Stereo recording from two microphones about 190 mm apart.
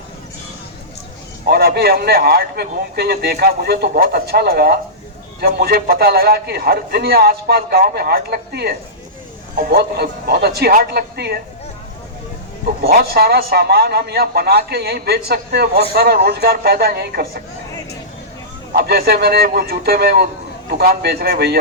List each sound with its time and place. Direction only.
1.5 s a man's voice: 55° right (ahead or behind)
12.6 s a man's voice: 55° right (ahead or behind)
18.8 s a man's voice: 55° right (ahead or behind)